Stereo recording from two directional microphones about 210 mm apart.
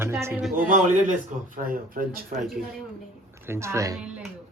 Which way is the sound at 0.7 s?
40° right (ahead or behind).